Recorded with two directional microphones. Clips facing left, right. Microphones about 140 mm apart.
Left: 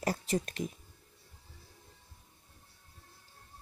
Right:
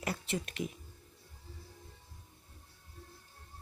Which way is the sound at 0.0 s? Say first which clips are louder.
Left 5 dB; 40° left (ahead or behind).